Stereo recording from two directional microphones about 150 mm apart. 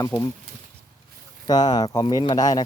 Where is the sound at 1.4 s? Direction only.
25° left (ahead or behind).